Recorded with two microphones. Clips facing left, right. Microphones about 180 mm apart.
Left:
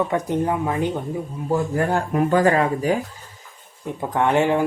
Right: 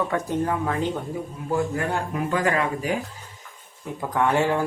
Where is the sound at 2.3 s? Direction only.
35° left (ahead or behind).